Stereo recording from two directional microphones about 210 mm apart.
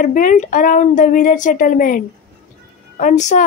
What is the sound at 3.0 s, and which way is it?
Speech, 35° left (ahead or behind).